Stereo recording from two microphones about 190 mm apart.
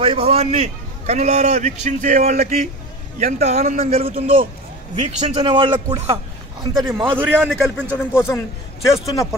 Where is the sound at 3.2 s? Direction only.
35° right (ahead or behind).